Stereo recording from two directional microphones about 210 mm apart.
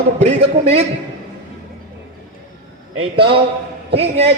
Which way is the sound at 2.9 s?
25° right (ahead or behind).